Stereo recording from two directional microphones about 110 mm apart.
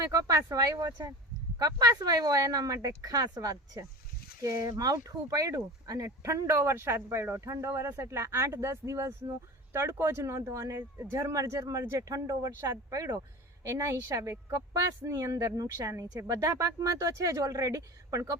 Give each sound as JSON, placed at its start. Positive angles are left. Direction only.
{"t": 0.0, "sound": "a woman's voice", "side_deg": -30}